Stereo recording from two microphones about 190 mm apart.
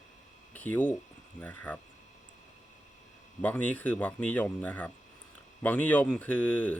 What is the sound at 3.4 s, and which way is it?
Speech, 10° left (ahead or behind).